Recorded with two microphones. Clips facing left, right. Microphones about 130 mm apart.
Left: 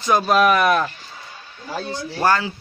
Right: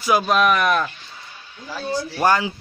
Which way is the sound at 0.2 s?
Centre (ahead or behind).